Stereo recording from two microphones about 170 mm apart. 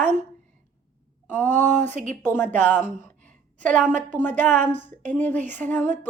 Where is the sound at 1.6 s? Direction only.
45° right (ahead or behind).